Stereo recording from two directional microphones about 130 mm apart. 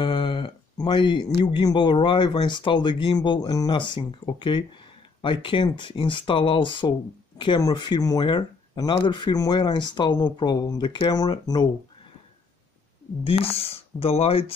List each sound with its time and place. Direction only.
0.0 s speech: 40° left (ahead or behind)
13.2 s speech: 45° left (ahead or behind)